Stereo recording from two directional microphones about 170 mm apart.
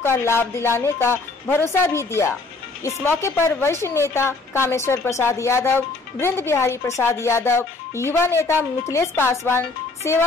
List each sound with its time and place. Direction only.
0.0 s a woman's voice: 15° left (ahead or behind)